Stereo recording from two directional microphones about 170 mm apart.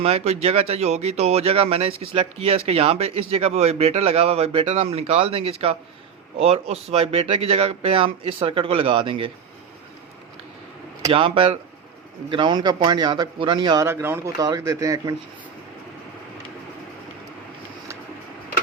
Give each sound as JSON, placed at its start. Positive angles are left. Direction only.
{"t": 0.0, "sound": "speech", "side_deg": -35}
{"t": 11.1, "sound": "a man's voice", "side_deg": -30}
{"t": 13.8, "sound": "a man's voice", "side_deg": -15}